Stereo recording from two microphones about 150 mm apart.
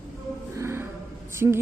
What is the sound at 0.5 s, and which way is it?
Music, 15° right (ahead or behind).